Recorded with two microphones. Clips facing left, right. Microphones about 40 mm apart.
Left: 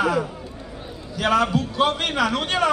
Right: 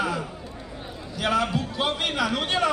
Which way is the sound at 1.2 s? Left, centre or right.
Centre.